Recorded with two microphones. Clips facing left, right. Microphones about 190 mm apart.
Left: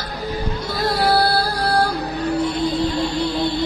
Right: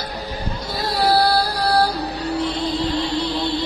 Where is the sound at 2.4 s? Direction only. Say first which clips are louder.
Left 2 dB; 50° left (ahead or behind).